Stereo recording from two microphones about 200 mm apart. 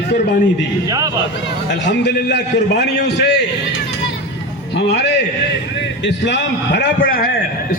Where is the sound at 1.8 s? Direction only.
60° left (ahead or behind).